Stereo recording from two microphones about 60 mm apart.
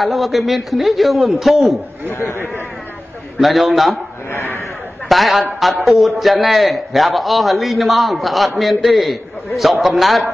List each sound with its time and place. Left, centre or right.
0.0 s a man's voice: centre
2.0 s a man's voice: left
3.3 s a man's voice: centre
4.3 s a sound: left
5.0 s a man's voice: centre